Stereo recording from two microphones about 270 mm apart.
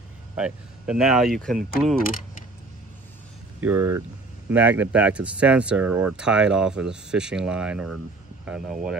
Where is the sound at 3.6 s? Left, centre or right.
Centre.